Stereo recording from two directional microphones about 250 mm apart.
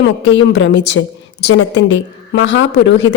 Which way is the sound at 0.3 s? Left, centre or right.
Left.